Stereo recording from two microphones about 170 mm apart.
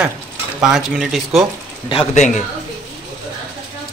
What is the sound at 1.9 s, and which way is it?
Speech, 35° left (ahead or behind).